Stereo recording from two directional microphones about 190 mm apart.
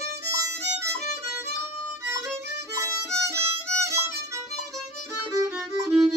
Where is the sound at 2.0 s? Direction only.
15° right (ahead or behind).